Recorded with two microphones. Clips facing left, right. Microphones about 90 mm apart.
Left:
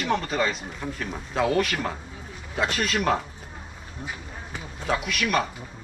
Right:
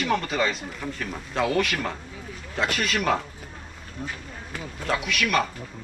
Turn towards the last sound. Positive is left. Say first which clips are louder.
# right 1 dB
turn(degrees=0)  # may be behind; listen again after turning